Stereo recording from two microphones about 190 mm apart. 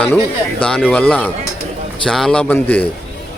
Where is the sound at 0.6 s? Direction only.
5° left (ahead or behind).